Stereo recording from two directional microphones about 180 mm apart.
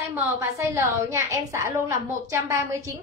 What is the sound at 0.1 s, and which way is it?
A woman's voice, 15° right (ahead or behind).